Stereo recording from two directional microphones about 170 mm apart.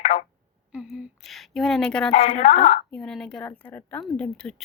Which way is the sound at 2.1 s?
40° left (ahead or behind).